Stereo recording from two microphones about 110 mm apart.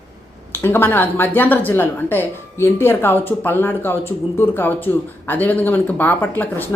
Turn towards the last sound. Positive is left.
turn(degrees=15)  # may be behind; listen again after turning